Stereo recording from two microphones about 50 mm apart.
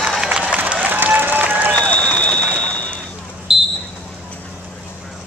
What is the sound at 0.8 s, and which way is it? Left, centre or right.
Applause, right.